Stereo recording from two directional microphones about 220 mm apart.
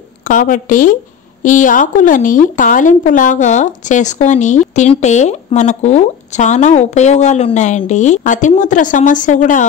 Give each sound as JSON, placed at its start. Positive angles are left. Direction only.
{"t": 0.2, "sound": "speech", "side_deg": 35}